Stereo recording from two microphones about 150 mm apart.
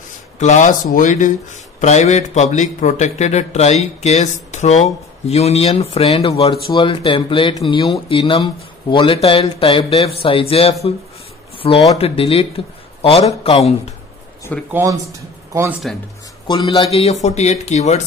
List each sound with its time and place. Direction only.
0.4 s speech: 55° left (ahead or behind); by 10.9 s 40° left (ahead or behind)
11.5 s a sound: 35° left (ahead or behind)
12.0 s a man's voice: 40° left (ahead or behind)
14.7 s speech: 20° right (ahead or behind)
15.8 s speech: centre (ahead or behind)
16.4 s speech: 35° left (ahead or behind)